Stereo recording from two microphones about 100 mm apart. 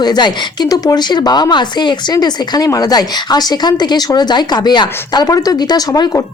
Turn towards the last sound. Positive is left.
turn(degrees=40)  # may be behind; listen again after turning